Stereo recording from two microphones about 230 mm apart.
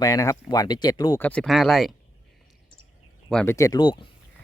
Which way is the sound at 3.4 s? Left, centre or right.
Centre.